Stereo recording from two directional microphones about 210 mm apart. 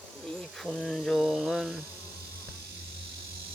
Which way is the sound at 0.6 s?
Centre (ahead or behind).